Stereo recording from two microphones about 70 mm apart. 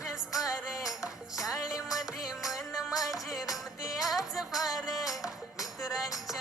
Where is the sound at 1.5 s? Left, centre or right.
Left.